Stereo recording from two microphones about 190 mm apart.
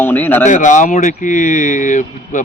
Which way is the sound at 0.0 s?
10° left (ahead or behind).